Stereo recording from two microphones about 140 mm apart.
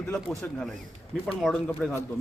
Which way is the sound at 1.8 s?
10° left (ahead or behind).